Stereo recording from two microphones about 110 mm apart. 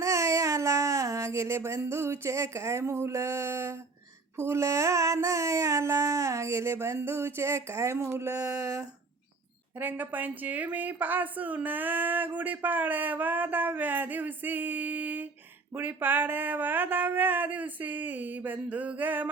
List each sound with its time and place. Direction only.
0.0 s a sound: 30° right (ahead or behind)
8.5 s speech: 30° right (ahead or behind)
9.7 s a woman's voice: 15° right (ahead or behind)